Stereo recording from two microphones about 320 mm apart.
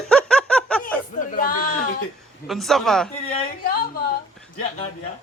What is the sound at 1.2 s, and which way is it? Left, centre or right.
Speech, left.